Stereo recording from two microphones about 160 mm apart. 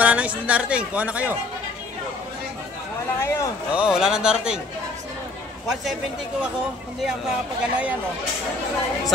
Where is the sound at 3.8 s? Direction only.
5° right (ahead or behind).